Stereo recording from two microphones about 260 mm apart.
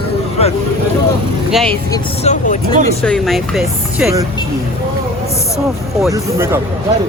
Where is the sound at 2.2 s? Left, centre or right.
Left.